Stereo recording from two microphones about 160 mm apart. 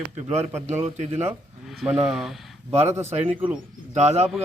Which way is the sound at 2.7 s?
40° right (ahead or behind).